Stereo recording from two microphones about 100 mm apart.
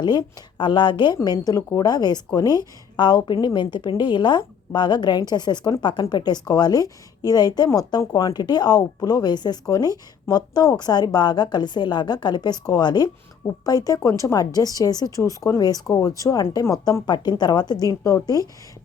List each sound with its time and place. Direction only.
0.0 s a woman's voice: 45° left (ahead or behind)
17.1 s a woman's voice: 45° left (ahead or behind)